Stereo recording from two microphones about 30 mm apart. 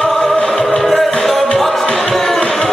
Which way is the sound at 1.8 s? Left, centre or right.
Left.